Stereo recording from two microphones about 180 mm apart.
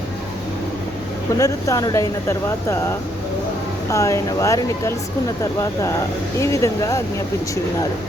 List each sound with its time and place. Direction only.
1.4 s speech: 15° left (ahead or behind)
3.8 s speech: 15° left (ahead or behind)
6.4 s speech: 15° left (ahead or behind)